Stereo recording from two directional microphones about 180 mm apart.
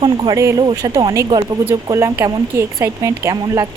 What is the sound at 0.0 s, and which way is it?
Speech, 25° right (ahead or behind).